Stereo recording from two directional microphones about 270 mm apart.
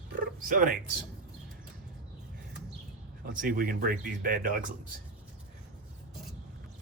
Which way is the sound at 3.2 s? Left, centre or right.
Right.